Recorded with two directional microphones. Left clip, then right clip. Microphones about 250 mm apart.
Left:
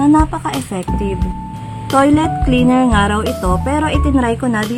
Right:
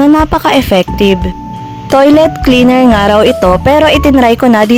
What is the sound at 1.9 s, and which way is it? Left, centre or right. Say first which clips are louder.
Speech: right 7 dB; right.